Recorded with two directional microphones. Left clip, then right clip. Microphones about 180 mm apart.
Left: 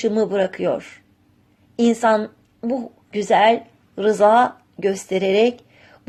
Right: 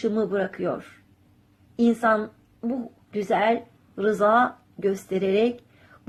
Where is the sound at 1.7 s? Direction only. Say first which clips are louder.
Left 5 dB; 25° left (ahead or behind).